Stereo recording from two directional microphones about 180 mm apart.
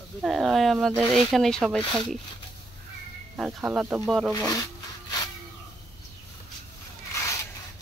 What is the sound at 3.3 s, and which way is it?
Speech, 5° right (ahead or behind).